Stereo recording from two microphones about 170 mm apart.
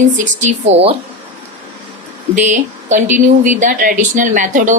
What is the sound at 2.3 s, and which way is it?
Speech, 45° right (ahead or behind).